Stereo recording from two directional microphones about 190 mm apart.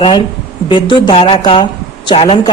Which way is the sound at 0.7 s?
25° left (ahead or behind).